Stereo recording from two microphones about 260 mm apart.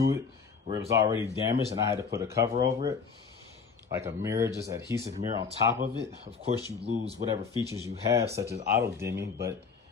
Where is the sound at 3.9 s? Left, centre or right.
Centre.